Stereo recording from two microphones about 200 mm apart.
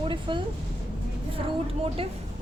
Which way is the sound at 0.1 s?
25° right (ahead or behind).